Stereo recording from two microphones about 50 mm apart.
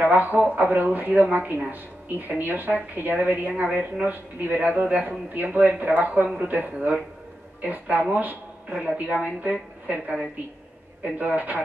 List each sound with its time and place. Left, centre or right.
0.0 s speech: right